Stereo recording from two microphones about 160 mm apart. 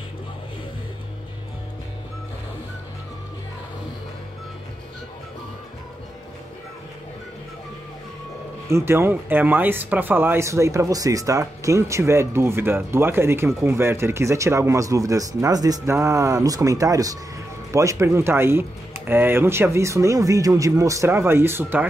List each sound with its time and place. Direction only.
8.6 s speech: 15° right (ahead or behind)